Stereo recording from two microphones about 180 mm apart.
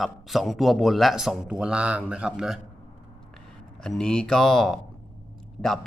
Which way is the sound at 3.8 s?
5° left (ahead or behind).